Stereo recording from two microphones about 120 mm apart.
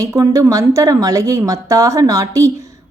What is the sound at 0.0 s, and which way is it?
A woman's voice, 25° right (ahead or behind).